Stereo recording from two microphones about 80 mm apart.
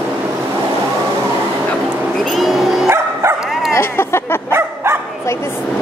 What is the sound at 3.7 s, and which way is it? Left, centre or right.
Speech, left.